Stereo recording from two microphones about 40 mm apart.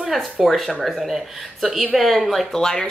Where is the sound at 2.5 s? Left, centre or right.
Centre.